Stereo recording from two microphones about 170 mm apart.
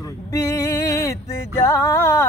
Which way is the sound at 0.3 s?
20° left (ahead or behind).